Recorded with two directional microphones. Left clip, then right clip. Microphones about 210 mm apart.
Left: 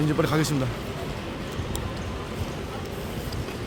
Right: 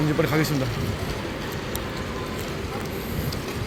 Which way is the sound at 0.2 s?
15° left (ahead or behind).